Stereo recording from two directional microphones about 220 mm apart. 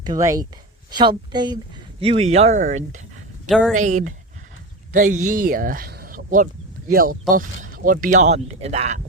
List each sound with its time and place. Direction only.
0.0 s speech: 15° right (ahead or behind); by 3.0 s 35° right (ahead or behind)
3.5 s speech: 5° left (ahead or behind)
3.8 s speech: 35° right (ahead or behind)